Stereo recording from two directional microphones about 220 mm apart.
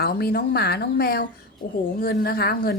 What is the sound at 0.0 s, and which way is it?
A woman's voice, 45° left (ahead or behind).